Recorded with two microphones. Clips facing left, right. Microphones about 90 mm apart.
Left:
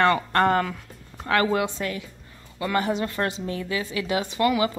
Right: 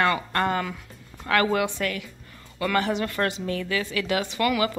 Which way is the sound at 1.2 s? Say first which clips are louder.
Even; 25° left (ahead or behind).